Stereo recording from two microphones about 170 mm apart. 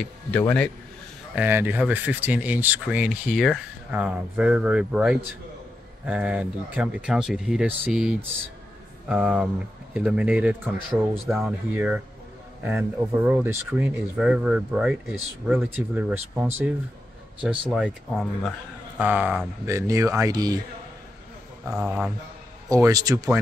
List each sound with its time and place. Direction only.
0.0 s speech: 10° left (ahead or behind)
1.3 s speech: 10° right (ahead or behind)
21.6 s speech: 5° right (ahead or behind)
22.7 s speech: 20° right (ahead or behind)